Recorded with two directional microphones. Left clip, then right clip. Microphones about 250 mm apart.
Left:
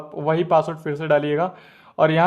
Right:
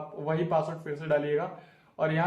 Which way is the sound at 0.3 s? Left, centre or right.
Left.